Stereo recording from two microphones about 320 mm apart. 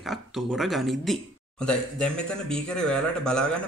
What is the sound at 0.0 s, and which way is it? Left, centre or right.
Speech, centre.